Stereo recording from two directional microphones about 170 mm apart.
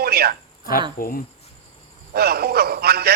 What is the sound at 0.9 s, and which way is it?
Speech, 55° left (ahead or behind).